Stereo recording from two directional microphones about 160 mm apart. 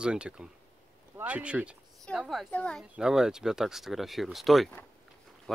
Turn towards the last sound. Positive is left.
turn(degrees=0)  # may be behind; listen again after turning